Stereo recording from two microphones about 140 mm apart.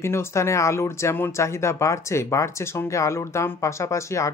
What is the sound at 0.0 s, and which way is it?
Speech, 20° left (ahead or behind).